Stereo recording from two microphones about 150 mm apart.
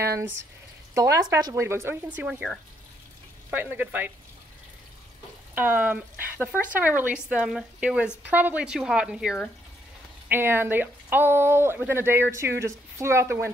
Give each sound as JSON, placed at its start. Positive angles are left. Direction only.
{"t": 0.0, "sound": "speech", "side_deg": -20}
{"t": 5.5, "sound": "speech", "side_deg": -10}
{"t": 10.2, "sound": "speech", "side_deg": -15}